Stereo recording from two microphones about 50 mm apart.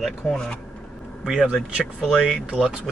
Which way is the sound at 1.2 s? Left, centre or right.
Centre.